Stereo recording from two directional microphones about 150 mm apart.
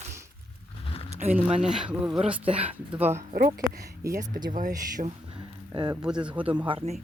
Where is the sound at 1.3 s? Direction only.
5° right (ahead or behind).